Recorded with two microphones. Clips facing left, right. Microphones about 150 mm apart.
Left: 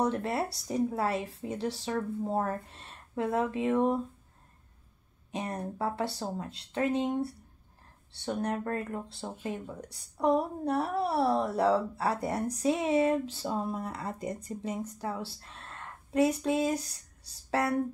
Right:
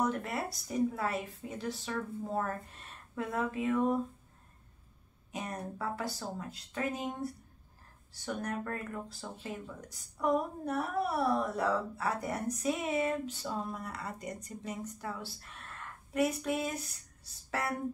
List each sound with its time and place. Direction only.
0.0 s a woman's voice: 30° left (ahead or behind)
5.3 s a woman's voice: 30° left (ahead or behind)